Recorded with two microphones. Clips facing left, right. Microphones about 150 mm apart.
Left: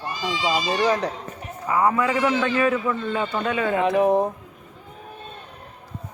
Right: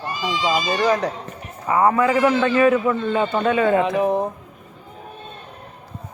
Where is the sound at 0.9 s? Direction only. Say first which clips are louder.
Right 5 dB; 30° left (ahead or behind).